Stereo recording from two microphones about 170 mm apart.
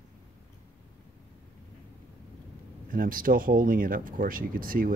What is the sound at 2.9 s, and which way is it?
Speech, 55° right (ahead or behind).